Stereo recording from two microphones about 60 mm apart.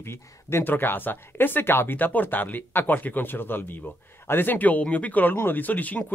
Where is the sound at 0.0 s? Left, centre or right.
Left.